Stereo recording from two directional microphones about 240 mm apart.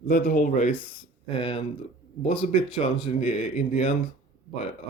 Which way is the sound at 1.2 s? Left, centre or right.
Left.